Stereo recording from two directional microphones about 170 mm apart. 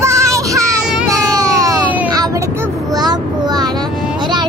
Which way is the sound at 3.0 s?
25° right (ahead or behind).